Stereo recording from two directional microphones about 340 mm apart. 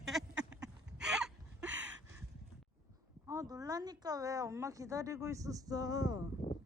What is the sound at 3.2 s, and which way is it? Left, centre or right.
Speech, centre.